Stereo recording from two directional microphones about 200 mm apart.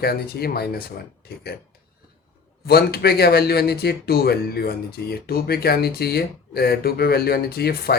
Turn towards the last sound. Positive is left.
turn(degrees=50)  # may be behind; listen again after turning